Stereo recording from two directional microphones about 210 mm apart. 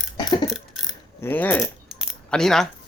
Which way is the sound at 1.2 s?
10° left (ahead or behind).